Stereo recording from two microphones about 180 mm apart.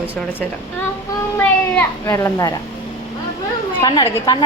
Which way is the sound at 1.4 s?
10° left (ahead or behind).